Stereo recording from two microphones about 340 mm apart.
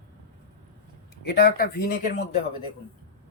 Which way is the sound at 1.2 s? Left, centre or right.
Left.